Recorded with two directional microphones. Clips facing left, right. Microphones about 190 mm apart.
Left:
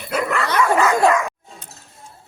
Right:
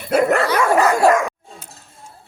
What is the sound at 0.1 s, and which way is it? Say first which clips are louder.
Dog: right 6 dB; 45° right (ahead or behind).